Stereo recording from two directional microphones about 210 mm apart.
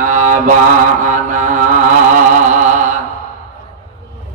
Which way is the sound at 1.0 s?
35° right (ahead or behind).